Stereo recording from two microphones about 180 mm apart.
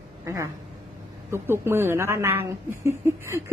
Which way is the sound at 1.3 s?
15° right (ahead or behind).